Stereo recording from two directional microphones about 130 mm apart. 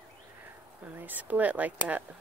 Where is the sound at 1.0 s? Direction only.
15° right (ahead or behind).